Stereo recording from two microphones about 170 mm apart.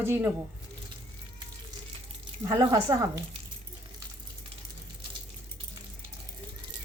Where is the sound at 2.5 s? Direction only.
25° right (ahead or behind).